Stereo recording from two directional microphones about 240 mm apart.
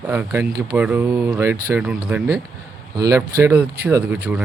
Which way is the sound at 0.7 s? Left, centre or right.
Centre.